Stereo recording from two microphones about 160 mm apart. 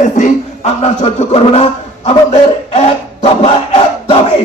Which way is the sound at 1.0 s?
40° left (ahead or behind).